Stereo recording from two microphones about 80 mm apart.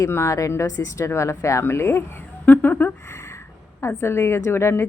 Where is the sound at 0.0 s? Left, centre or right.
Left.